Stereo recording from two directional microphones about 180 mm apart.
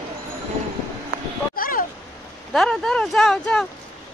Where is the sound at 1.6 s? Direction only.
50° left (ahead or behind).